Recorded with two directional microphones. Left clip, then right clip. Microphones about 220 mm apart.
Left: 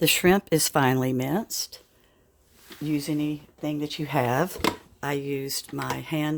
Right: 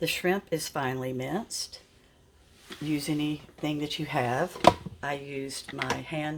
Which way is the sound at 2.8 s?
25° left (ahead or behind).